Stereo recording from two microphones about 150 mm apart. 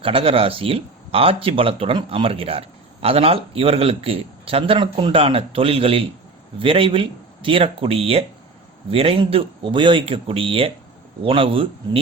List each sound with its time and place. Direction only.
0.0 s speech: 40° right (ahead or behind)